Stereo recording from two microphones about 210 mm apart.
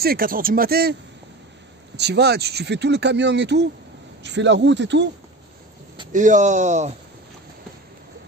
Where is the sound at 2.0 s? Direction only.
50° right (ahead or behind).